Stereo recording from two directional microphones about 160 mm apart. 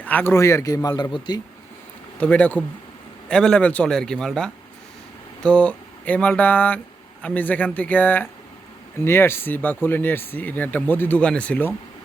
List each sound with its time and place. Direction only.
0.0 s a man's voice: 10° left (ahead or behind); by 1.4 s 25° left (ahead or behind)
2.1 s a man's voice: 10° left (ahead or behind)
5.4 s a sound: 5° left (ahead or behind)
7.2 s speech: 10° left (ahead or behind)